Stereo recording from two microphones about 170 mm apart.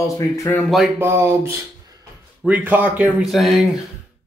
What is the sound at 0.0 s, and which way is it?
Speech, 20° left (ahead or behind).